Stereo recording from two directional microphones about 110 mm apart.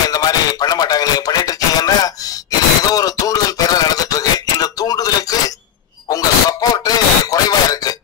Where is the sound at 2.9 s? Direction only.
35° left (ahead or behind).